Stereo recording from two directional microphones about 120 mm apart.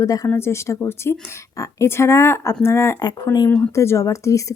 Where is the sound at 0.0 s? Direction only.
30° left (ahead or behind).